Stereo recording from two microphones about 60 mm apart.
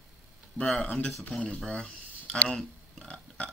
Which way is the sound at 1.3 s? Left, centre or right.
Centre.